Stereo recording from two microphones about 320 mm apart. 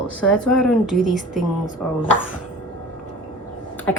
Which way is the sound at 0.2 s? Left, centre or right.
Centre.